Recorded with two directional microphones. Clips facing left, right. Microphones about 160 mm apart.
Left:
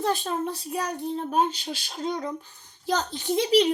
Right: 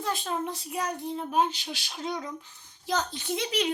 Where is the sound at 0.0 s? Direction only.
35° left (ahead or behind).